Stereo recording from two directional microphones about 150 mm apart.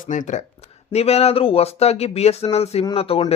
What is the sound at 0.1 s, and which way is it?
Speech, 55° left (ahead or behind).